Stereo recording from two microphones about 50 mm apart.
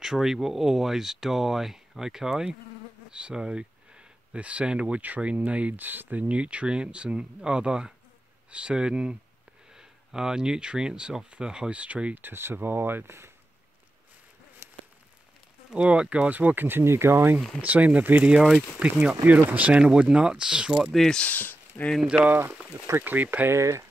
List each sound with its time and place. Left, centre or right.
0.0 s speech: centre; by 5.8 s right
5.8 s speech: right
12.2 s speech: right
14.6 s rain on surface: right
15.7 s speech: right
17.6 s speech: right
19.2 s speech: right
19.7 s speech: centre
20.9 s speech: centre
21.2 s speech: left
22.3 s speech: right
23.5 s speech: right